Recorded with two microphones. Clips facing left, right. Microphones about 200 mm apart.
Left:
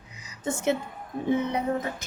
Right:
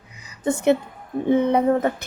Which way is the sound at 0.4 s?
60° right (ahead or behind).